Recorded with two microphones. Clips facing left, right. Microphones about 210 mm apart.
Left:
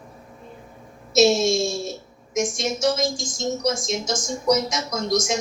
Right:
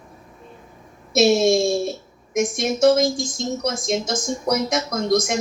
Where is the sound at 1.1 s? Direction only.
55° right (ahead or behind).